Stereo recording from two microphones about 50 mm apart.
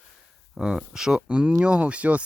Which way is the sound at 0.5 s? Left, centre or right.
Centre.